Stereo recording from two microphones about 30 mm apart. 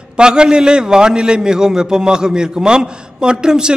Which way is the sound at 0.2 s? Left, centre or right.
Right.